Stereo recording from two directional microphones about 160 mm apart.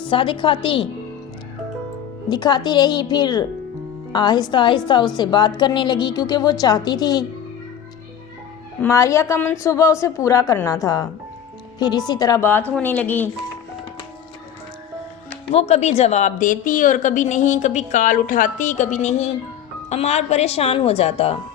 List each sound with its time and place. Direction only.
0.0 s speech: 35° left (ahead or behind)
2.3 s a woman's voice: 25° left (ahead or behind)
8.8 s a woman's voice: 20° left (ahead or behind)
15.5 s a woman's voice: 40° left (ahead or behind)